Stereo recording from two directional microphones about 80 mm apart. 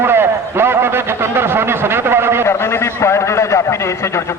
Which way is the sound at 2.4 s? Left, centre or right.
Left.